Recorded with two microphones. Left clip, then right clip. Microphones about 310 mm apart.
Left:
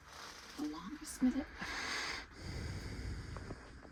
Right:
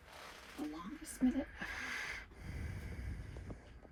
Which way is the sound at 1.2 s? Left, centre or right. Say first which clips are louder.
Even; centre.